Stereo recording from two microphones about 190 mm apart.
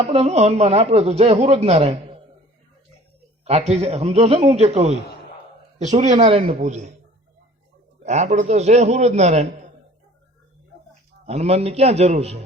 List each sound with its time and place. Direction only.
0.1 s a man's voice: 35° right (ahead or behind)
3.4 s a man's voice: 35° right (ahead or behind)
8.0 s a man's voice: 35° right (ahead or behind)
11.3 s a man's voice: 35° right (ahead or behind)